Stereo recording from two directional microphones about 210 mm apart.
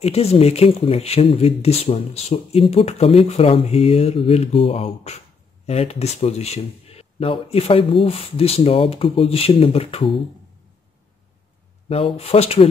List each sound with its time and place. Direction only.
0.0 s speech: 30° left (ahead or behind)
11.9 s speech: 30° left (ahead or behind)